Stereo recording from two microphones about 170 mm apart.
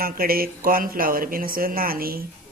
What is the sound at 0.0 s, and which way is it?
Speech, 60° right (ahead or behind).